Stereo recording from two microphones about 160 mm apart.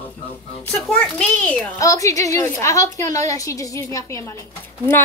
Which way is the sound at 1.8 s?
20° left (ahead or behind).